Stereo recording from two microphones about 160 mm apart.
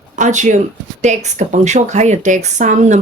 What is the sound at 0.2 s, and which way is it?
Speech, 50° right (ahead or behind).